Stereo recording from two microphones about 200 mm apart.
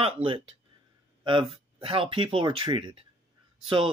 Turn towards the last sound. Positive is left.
turn(degrees=-25)  # may be behind; listen again after turning